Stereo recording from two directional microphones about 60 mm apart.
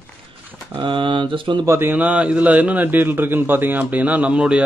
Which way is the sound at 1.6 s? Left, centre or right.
Right.